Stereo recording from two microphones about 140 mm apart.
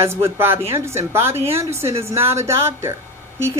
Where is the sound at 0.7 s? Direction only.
20° right (ahead or behind).